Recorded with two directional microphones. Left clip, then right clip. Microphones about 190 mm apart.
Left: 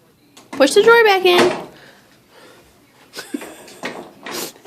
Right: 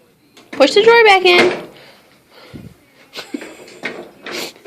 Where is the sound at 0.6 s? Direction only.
15° left (ahead or behind).